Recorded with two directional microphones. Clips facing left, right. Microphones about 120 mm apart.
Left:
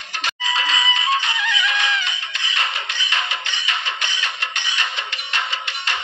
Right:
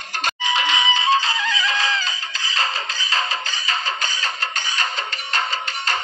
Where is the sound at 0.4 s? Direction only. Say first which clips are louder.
Right 2 dB; 30° right (ahead or behind).